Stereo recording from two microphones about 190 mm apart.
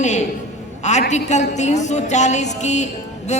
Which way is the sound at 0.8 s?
40° left (ahead or behind).